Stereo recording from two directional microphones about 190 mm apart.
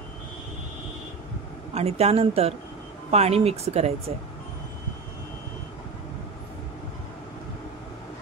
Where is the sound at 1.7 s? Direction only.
35° right (ahead or behind).